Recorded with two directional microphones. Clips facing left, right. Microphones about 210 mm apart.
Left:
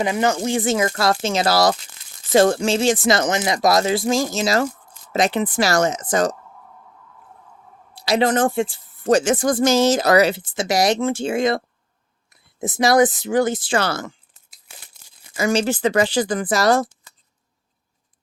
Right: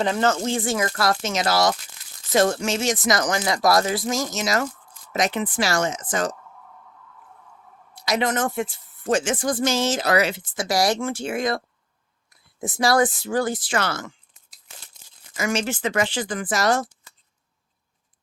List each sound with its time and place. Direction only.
0.0 s speech: 10° left (ahead or behind); by 6.3 s 40° left (ahead or behind)
7.9 s speech: 30° left (ahead or behind)
10.5 s speech: 25° left (ahead or behind)
15.4 s speech: 35° left (ahead or behind)